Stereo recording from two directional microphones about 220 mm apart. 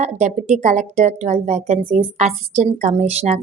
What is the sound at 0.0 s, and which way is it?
Speech, 30° right (ahead or behind).